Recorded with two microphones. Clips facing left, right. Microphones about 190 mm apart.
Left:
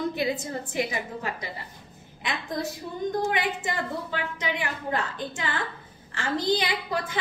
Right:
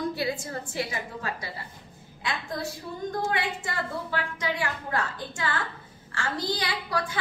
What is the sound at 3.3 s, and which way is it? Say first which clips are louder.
A woman's voice: left 2 dB; 20° left (ahead or behind).